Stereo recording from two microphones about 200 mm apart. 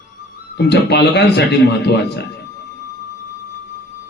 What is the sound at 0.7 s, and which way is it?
A man's voice, 55° left (ahead or behind).